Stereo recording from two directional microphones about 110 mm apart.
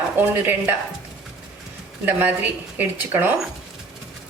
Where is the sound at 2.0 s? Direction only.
15° right (ahead or behind).